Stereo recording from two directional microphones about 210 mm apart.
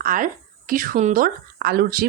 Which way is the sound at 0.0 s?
40° right (ahead or behind).